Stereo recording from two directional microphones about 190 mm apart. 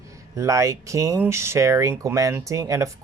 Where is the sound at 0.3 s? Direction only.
15° right (ahead or behind).